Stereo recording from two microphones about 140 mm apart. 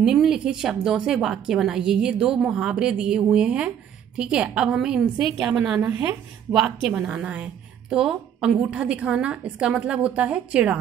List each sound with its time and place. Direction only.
0.0 s a woman's voice: 5° right (ahead or behind)